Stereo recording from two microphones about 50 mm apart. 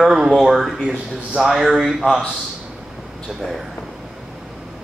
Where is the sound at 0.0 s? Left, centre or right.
Centre.